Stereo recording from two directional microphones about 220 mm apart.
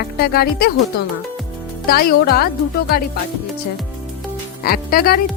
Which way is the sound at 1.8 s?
45° left (ahead or behind).